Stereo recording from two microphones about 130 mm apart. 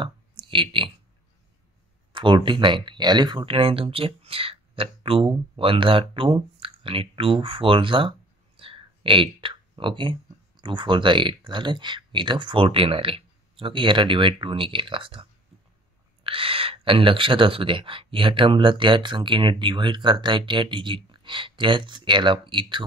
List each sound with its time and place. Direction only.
0.0 s speech: 40° right (ahead or behind)
2.1 s speech: 40° right (ahead or behind)
16.3 s speech: 45° right (ahead or behind)